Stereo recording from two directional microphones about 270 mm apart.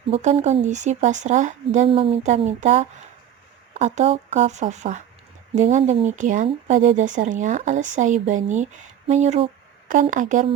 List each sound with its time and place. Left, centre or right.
0.1 s speech: right